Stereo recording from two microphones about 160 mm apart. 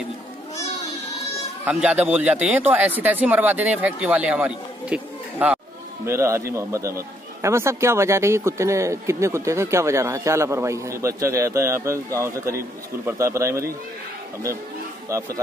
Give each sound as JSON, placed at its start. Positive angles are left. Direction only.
{"t": 1.6, "sound": "speech", "side_deg": -10}
{"t": 15.0, "sound": "speech", "side_deg": -20}